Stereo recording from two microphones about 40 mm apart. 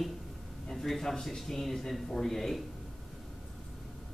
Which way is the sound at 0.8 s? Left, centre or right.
Centre.